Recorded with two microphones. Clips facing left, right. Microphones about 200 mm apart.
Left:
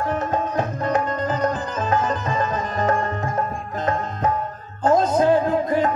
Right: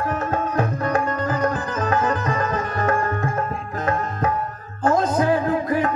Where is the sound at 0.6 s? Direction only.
20° left (ahead or behind).